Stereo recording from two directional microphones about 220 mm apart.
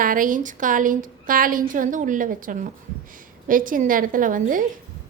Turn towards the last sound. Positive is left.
turn(degrees=-40)  # may be behind; listen again after turning